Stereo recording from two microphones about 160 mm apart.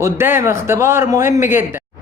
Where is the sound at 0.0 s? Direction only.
15° right (ahead or behind).